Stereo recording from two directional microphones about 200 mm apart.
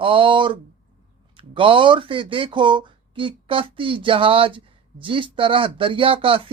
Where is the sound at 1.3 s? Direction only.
25° right (ahead or behind).